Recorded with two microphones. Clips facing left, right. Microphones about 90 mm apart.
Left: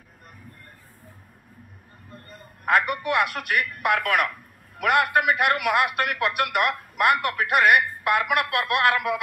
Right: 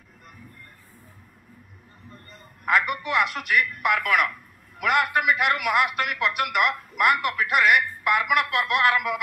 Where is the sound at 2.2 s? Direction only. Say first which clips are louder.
Left 1 dB; 50° left (ahead or behind).